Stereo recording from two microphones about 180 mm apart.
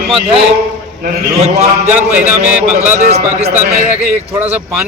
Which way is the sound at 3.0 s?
40° right (ahead or behind).